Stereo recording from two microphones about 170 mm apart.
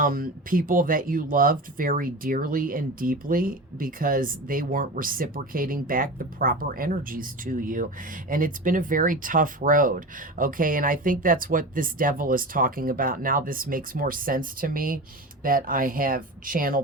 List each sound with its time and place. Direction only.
0.0 s speech: 55° right (ahead or behind)